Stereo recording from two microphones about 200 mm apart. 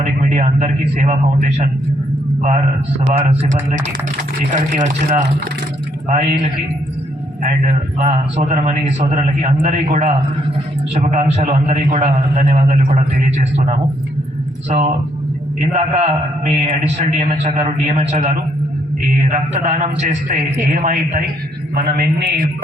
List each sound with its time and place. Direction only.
0.0 s a man's voice: 35° right (ahead or behind)
3.1 s a man's voice: 30° right (ahead or behind)
15.7 s a man's voice: 30° right (ahead or behind)